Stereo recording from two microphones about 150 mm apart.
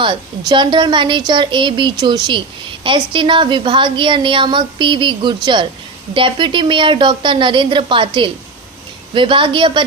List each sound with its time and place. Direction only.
0.0 s a woman's voice: 30° right (ahead or behind)